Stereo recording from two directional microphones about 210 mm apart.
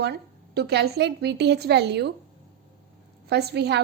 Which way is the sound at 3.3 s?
50° right (ahead or behind).